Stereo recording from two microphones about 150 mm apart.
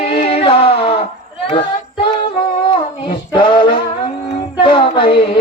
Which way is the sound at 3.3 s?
35° left (ahead or behind).